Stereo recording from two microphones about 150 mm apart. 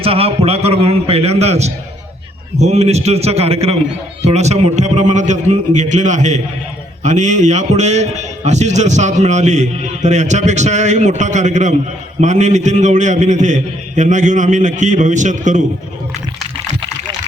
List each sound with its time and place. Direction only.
0.0 s a man's voice: 40° right (ahead or behind); by 15.6 s 55° right (ahead or behind)